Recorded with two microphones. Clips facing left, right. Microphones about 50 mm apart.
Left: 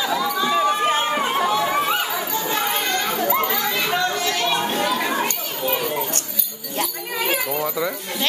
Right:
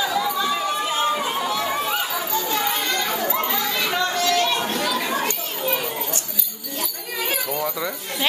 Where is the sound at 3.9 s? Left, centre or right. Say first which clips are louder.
Right 3 dB; centre.